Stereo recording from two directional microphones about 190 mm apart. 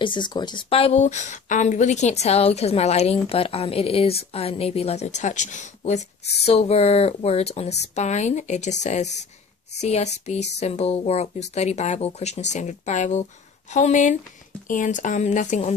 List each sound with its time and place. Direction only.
0.0 s a woman's voice: 25° left (ahead or behind); by 15.7 s 40° left (ahead or behind)